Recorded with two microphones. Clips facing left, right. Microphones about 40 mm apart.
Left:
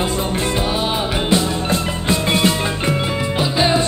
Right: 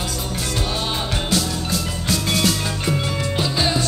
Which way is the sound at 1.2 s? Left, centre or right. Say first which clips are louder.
Left 7 dB; left.